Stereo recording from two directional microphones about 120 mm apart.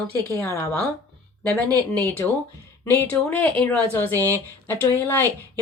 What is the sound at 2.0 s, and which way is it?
Speech, 15° left (ahead or behind).